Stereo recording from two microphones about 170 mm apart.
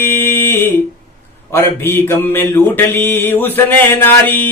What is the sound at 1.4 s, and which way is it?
Mantra, 15° left (ahead or behind).